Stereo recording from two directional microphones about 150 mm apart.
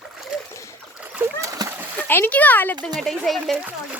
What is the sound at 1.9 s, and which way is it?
Speech, 15° left (ahead or behind).